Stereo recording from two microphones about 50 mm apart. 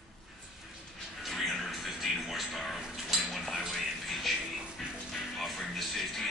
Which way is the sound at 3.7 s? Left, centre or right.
Centre.